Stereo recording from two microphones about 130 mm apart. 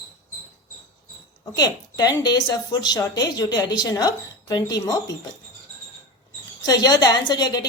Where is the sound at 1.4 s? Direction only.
30° left (ahead or behind).